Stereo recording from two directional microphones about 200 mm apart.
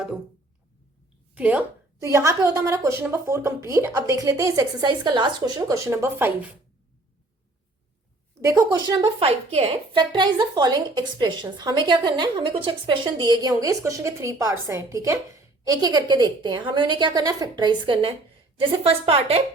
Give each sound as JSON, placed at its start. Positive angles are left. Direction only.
{"t": 1.4, "sound": "a woman's voice", "side_deg": -5}
{"t": 8.4, "sound": "a woman's voice", "side_deg": -15}